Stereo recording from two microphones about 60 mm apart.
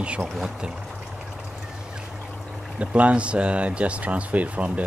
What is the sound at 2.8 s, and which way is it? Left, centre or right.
Speech, right.